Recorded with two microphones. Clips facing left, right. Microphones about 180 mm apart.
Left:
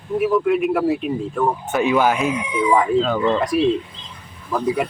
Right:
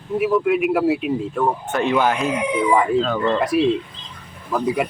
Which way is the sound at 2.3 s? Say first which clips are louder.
Right 2 dB; 60° right (ahead or behind).